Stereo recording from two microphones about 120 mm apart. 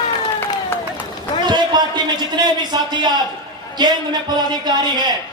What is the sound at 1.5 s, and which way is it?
A man's voice, 35° right (ahead or behind).